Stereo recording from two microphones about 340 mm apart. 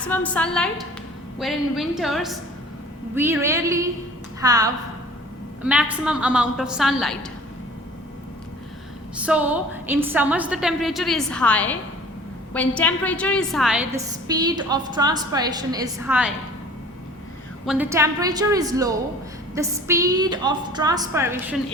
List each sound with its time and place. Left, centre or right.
0.1 s a woman's voice: centre
9.2 s a woman's voice: centre
17.7 s a woman's voice: centre